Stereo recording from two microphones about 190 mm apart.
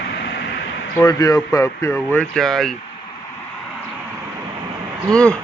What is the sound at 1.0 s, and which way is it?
Speech, 15° left (ahead or behind).